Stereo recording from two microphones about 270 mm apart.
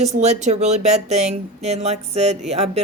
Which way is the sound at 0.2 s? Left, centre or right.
Right.